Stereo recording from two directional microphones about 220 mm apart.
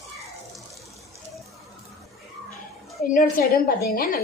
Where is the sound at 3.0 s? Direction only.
40° left (ahead or behind).